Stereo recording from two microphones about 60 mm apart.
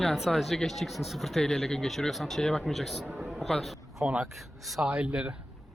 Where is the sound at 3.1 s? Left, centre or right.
Centre.